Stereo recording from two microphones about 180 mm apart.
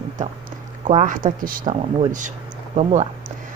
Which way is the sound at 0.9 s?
45° right (ahead or behind).